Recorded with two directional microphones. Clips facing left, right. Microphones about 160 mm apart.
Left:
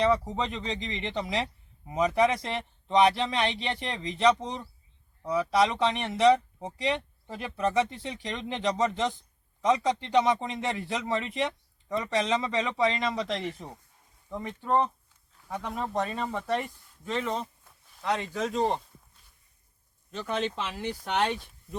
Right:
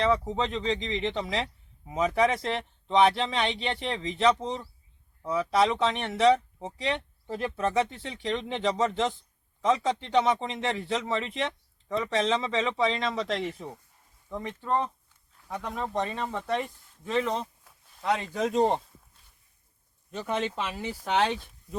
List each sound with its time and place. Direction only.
0.0 s a man's voice: centre (ahead or behind)
15.5 s a man's voice: centre (ahead or behind)
18.3 s speech: 20° right (ahead or behind)
20.1 s speech: 10° right (ahead or behind)